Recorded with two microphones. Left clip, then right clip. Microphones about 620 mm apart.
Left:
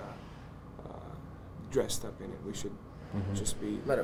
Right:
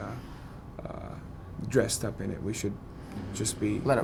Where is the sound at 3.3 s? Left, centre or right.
Right.